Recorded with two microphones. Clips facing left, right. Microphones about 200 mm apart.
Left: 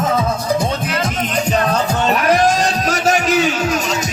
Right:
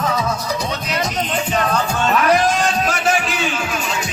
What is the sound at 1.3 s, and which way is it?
Music, 40° left (ahead or behind).